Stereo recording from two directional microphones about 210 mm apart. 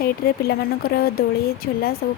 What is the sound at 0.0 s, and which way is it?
Speech, 45° left (ahead or behind).